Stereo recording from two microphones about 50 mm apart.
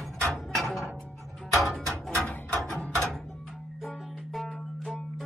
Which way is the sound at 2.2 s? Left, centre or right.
Centre.